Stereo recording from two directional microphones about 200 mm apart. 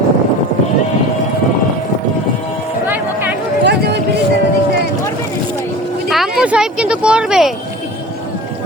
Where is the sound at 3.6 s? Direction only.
55° right (ahead or behind).